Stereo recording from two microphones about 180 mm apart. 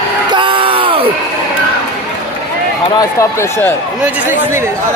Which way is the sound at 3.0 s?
15° left (ahead or behind).